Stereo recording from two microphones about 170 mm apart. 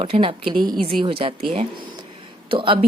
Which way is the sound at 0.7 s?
Centre (ahead or behind).